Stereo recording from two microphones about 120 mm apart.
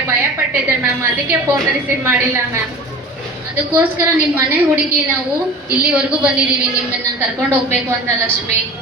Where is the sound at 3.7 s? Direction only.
20° right (ahead or behind).